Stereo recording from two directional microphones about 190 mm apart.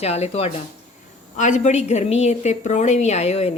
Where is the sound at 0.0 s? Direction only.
35° left (ahead or behind).